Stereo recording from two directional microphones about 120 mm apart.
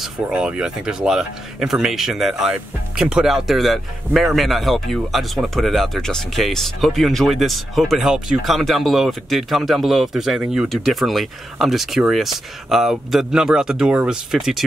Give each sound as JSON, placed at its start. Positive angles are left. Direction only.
{"t": 0.0, "sound": "speech", "side_deg": -10}